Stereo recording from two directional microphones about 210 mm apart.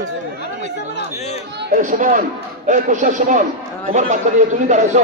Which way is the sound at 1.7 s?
40° right (ahead or behind).